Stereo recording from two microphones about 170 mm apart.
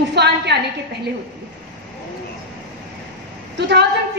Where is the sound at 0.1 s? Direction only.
80° right.